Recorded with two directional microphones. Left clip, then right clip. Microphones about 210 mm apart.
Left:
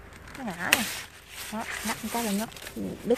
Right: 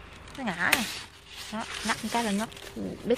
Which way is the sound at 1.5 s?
10° left (ahead or behind).